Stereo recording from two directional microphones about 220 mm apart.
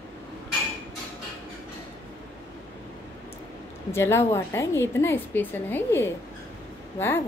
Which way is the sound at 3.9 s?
10° left (ahead or behind).